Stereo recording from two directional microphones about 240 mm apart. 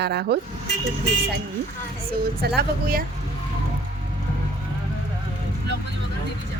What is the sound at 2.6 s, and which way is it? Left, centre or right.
Speech, right.